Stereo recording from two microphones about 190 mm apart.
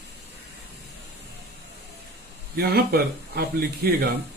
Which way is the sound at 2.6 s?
55° right (ahead or behind).